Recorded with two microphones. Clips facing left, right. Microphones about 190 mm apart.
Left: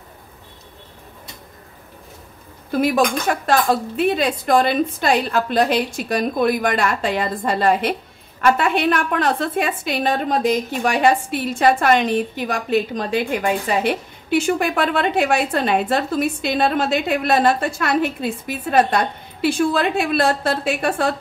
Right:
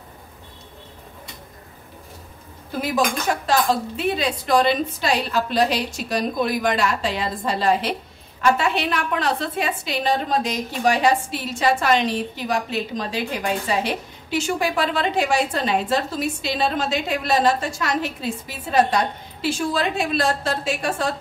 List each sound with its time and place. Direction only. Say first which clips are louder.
3.3 s a woman's voice: left 2 dB; 55° left (ahead or behind)